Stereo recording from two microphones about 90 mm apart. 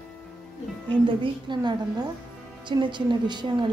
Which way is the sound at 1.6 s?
50° right (ahead or behind).